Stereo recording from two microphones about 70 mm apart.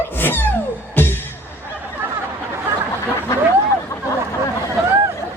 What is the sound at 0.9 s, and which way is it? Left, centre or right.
Music, left.